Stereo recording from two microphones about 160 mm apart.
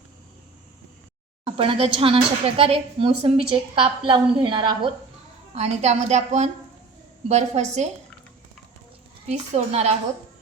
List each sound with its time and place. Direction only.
1.5 s speech: 35° right (ahead or behind)
5.5 s a woman's voice: 45° right (ahead or behind)
9.2 s a woman's voice: 45° right (ahead or behind)